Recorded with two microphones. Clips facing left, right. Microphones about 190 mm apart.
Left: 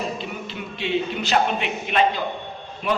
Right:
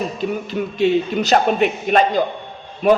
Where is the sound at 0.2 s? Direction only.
45° right (ahead or behind).